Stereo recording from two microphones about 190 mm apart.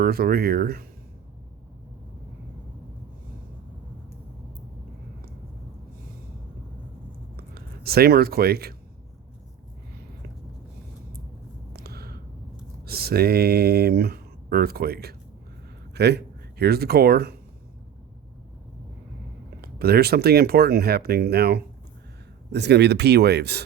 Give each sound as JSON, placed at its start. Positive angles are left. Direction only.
{"t": 0.0, "sound": "speech", "side_deg": -55}
{"t": 7.3, "sound": "speech", "side_deg": -55}
{"t": 11.7, "sound": "a sound", "side_deg": -55}
{"t": 12.8, "sound": "speech", "side_deg": -55}
{"t": 19.6, "sound": "speech", "side_deg": -55}